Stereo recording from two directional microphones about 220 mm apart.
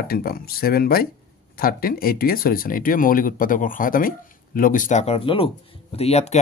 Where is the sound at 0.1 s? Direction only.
45° left (ahead or behind).